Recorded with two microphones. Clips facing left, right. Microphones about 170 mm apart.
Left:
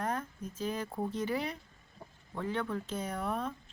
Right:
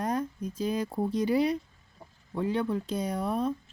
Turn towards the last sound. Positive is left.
turn(degrees=-15)  # may be behind; listen again after turning